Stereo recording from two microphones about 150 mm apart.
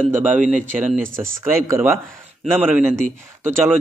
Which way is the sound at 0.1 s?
10° right (ahead or behind).